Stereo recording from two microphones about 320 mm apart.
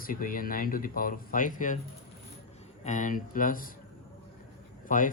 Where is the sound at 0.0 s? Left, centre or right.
Left.